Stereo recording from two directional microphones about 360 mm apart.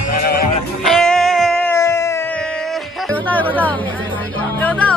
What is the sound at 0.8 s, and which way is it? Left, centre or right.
Music, centre.